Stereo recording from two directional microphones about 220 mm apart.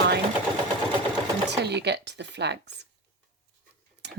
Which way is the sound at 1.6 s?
50° right (ahead or behind).